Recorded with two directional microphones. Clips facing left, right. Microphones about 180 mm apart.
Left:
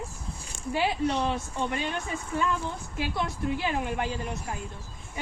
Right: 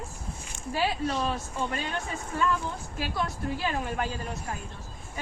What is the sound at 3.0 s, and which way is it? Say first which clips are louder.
Speech: left 1 dB; 20° left (ahead or behind).